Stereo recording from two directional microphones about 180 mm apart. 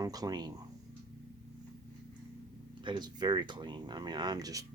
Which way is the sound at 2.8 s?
25° right (ahead or behind).